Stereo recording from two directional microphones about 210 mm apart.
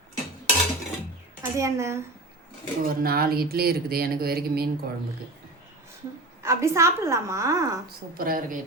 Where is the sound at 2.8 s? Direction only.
45° right (ahead or behind).